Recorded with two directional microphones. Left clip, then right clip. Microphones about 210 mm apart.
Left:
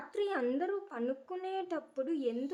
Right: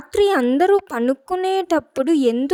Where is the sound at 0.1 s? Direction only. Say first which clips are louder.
Right 17 dB; 50° right (ahead or behind).